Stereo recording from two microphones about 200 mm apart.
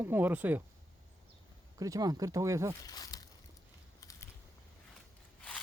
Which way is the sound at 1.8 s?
15° right (ahead or behind).